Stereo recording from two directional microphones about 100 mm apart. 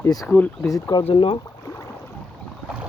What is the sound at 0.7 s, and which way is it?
Speech, 40° left (ahead or behind).